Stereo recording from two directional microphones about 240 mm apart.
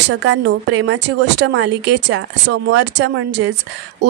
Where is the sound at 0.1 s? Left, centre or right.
Right.